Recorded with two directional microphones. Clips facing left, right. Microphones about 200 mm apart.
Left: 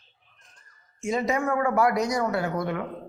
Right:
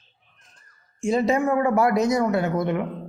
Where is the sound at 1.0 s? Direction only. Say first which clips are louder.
Right 5 dB; 30° right (ahead or behind).